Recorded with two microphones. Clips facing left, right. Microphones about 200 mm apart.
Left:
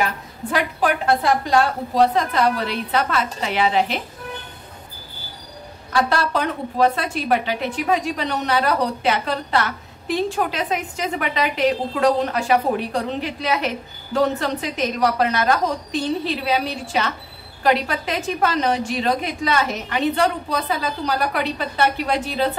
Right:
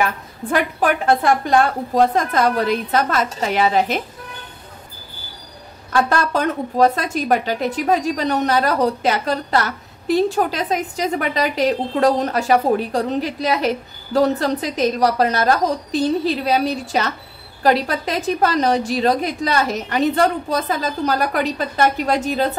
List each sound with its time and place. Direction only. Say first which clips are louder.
0.5 s a woman's voice: right 2 dB; 50° right (ahead or behind)
5.9 s a woman's voice: right 2 dB; 45° right (ahead or behind)